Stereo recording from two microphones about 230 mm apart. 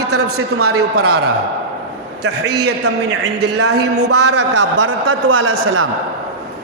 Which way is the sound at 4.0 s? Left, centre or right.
Right.